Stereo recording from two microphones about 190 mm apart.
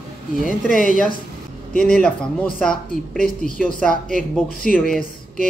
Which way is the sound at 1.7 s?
50° left (ahead or behind).